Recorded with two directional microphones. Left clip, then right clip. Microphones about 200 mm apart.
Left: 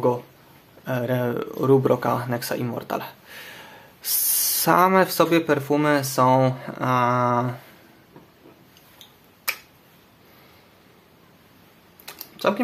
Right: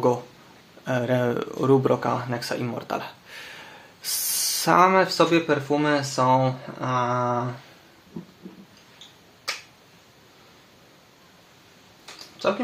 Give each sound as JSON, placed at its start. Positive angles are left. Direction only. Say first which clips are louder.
{"t": 0.8, "sound": "speech", "louder": "right 1 dB", "side_deg": 5}